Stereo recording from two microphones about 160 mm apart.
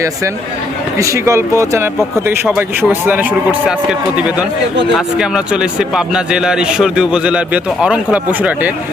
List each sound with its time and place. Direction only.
0.9 s a man's voice: 20° right (ahead or behind)